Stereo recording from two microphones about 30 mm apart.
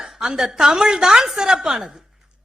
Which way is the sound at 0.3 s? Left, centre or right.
Centre.